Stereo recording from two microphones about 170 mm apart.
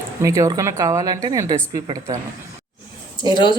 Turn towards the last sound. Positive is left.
turn(degrees=25)  # may be behind; listen again after turning